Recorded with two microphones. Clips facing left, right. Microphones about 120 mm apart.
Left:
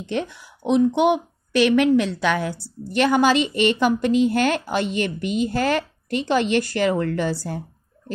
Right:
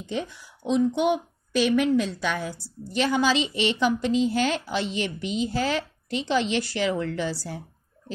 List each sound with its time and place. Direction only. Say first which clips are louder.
0.0 s a woman's voice: left 4 dB; 65° left (ahead or behind); by 7.6 s 50° left (ahead or behind)